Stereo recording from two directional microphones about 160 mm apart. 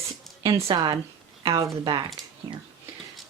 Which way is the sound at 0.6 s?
30° right (ahead or behind).